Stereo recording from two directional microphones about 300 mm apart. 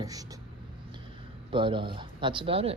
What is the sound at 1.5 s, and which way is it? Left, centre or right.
Speech, centre.